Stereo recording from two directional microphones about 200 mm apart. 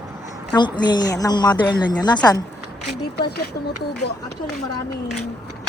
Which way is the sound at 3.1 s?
55° left (ahead or behind).